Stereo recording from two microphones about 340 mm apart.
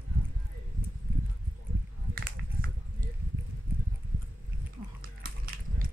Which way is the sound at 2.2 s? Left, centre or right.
Right.